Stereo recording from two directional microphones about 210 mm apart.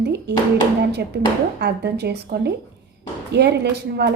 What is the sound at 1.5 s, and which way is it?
A woman's voice, 50° right (ahead or behind).